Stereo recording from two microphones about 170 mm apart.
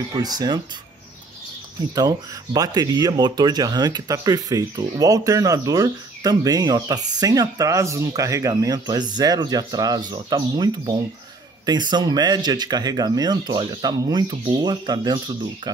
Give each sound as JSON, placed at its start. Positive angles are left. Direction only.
{"t": 0.1, "sound": "speech", "side_deg": -25}
{"t": 2.0, "sound": "speech", "side_deg": -20}